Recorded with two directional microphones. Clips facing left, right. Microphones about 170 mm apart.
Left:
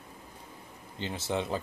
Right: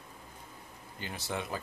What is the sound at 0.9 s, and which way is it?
Speech, 25° left (ahead or behind).